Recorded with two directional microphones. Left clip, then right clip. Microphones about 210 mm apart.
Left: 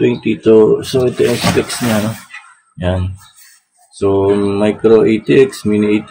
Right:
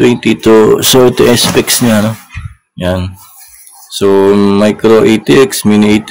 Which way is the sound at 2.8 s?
30° right (ahead or behind).